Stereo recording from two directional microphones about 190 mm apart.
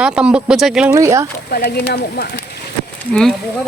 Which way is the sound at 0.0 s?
5° right (ahead or behind).